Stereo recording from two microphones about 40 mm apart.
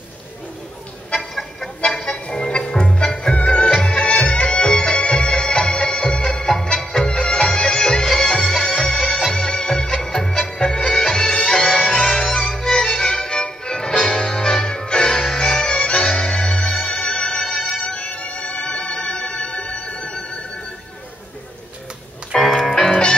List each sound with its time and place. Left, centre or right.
2.2 s music: left; by 9.3 s centre
9.3 s music: centre
12.6 s music: centre
17.5 s music: centre
17.8 s music: left
22.3 s music: centre